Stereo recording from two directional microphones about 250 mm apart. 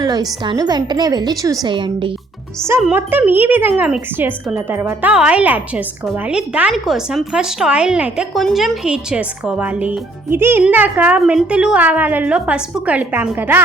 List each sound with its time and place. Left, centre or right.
0.0 s speech: centre
2.6 s speech: centre